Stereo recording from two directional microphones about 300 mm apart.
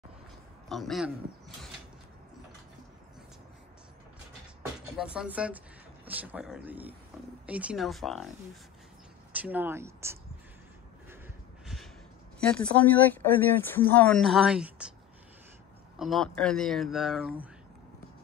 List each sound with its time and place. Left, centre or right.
0.7 s speech: centre
4.9 s speech: centre
9.3 s speech: centre
11.6 s a sound: centre
12.4 s speech: centre
16.0 s speech: centre